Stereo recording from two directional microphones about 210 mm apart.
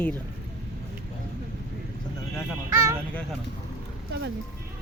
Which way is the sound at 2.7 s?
15° right (ahead or behind).